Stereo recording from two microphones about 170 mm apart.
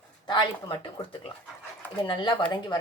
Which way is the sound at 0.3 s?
25° left (ahead or behind).